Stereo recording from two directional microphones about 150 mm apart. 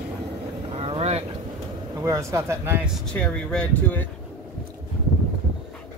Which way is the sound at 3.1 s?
5° left (ahead or behind).